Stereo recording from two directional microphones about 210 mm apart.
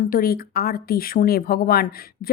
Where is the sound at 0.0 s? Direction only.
45° left (ahead or behind).